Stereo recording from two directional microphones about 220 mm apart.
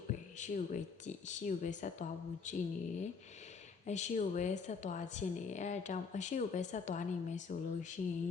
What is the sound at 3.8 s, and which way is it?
Speech, 30° left (ahead or behind).